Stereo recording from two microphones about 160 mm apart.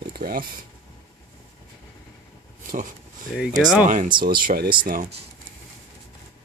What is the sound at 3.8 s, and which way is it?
Speech, 55° right (ahead or behind).